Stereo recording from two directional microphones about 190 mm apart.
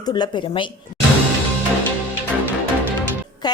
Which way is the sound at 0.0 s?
20° left (ahead or behind).